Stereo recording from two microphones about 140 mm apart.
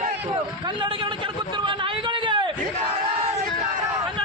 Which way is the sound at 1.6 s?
35° right (ahead or behind).